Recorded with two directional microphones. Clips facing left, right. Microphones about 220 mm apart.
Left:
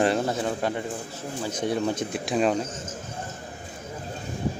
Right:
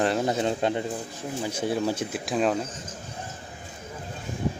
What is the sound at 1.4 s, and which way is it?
Speech, 10° right (ahead or behind).